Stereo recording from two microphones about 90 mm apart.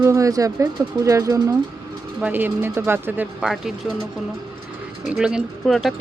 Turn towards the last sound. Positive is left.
turn(degrees=0)  # may be behind; listen again after turning